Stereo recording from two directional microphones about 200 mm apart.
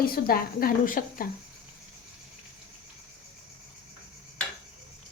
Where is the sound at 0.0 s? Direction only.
45° left (ahead or behind).